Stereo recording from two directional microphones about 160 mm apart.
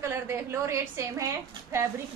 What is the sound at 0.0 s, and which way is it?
A woman's voice, 15° right (ahead or behind).